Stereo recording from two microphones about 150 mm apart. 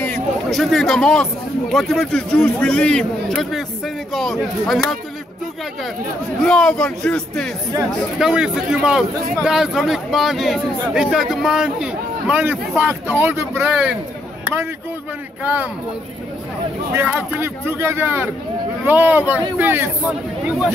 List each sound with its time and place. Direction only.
0.0 s speech: 5° left (ahead or behind)
6.4 s speech: 5° left (ahead or behind)
15.4 s speech: 10° right (ahead or behind)
16.9 s speech: 15° right (ahead or behind)